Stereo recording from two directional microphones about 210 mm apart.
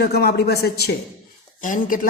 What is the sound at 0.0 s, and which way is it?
A woman's voice, 50° left (ahead or behind).